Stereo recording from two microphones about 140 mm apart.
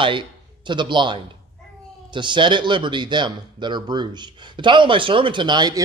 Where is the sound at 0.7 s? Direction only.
35° right (ahead or behind).